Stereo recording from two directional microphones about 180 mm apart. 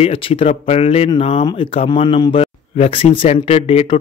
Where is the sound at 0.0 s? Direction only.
30° left (ahead or behind).